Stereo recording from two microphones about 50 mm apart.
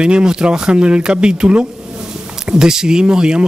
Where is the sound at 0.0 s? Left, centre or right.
Centre.